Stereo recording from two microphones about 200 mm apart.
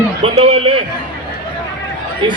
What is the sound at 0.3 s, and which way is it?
Speech, 30° right (ahead or behind).